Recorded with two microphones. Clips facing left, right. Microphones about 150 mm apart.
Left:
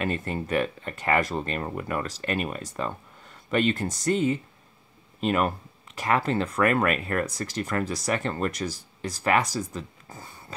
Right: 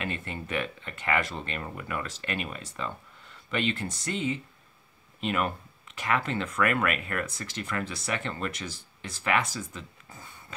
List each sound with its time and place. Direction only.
0.0 s speech: 40° left (ahead or behind)